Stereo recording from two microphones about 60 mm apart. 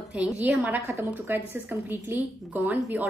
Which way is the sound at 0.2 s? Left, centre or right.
Right.